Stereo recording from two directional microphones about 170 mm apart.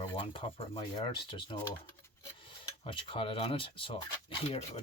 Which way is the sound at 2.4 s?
30° left (ahead or behind).